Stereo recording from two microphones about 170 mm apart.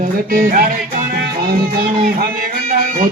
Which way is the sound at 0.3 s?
55° right (ahead or behind).